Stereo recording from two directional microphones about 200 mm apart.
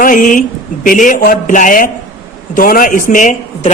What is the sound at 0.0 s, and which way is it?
A woman's voice, 40° left (ahead or behind).